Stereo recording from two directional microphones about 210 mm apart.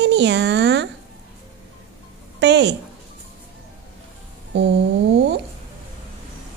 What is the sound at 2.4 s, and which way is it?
Speech, 55° right (ahead or behind).